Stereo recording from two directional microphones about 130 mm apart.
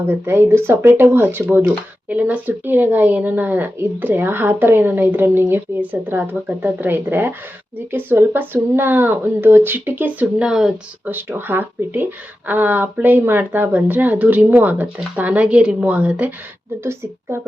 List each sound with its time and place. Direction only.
0.0 s speech: 20° right (ahead or behind)